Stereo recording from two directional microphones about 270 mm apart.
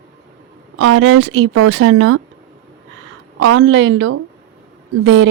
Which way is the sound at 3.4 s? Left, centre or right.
Right.